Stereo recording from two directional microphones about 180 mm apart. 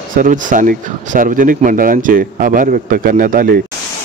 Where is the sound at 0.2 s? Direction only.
45° right (ahead or behind).